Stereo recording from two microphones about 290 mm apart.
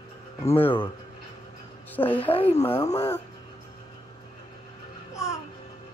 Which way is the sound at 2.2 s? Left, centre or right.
Centre.